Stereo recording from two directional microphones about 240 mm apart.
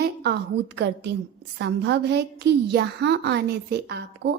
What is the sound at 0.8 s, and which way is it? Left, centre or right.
A woman's voice, right.